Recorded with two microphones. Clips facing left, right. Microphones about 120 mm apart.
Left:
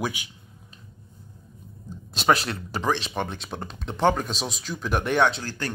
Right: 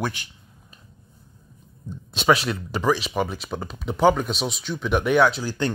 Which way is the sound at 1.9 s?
Centre (ahead or behind).